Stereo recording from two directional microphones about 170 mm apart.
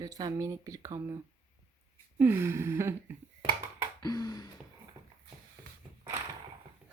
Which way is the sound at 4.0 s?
20° left (ahead or behind).